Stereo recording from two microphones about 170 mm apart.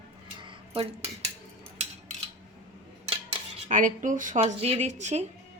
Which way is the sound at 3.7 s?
50° right (ahead or behind).